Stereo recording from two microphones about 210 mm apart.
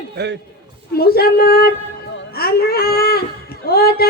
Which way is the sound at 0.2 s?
50° right (ahead or behind).